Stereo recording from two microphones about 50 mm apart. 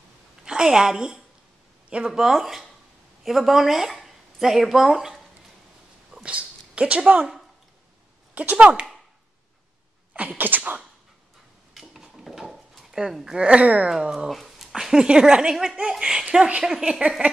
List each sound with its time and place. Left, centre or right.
0.4 s a woman's voice: centre
6.2 s speech: right
8.4 s speech: right
10.1 s speech: right
11.7 s a sound: centre; by 13.8 s right
13.8 s speech: centre
14.3 s speech: centre